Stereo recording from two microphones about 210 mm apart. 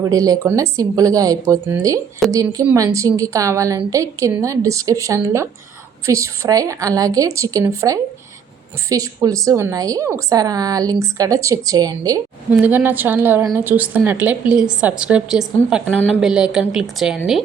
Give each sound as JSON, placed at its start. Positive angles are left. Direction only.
{"t": 0.0, "sound": "a woman's voice", "side_deg": -15}